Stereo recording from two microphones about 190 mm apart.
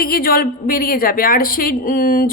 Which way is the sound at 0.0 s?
50° left (ahead or behind).